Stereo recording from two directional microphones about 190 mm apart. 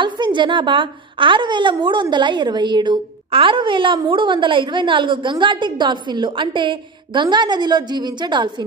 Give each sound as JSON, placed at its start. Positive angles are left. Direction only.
{"t": 0.0, "sound": "a woman's voice", "side_deg": -25}